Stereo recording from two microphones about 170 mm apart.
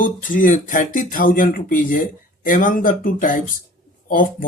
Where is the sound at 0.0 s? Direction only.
50° left (ahead or behind).